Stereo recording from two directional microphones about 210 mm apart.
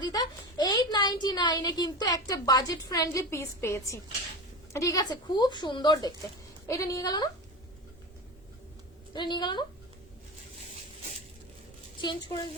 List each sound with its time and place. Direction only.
0.0 s a woman's voice: 20° left (ahead or behind)
9.1 s speech: 20° left (ahead or behind)
12.0 s speech: 20° left (ahead or behind)